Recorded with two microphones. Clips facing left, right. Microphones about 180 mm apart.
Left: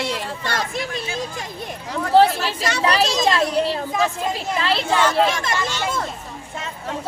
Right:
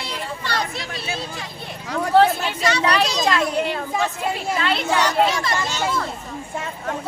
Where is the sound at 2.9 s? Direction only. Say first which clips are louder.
Left 4 dB; 25° left (ahead or behind).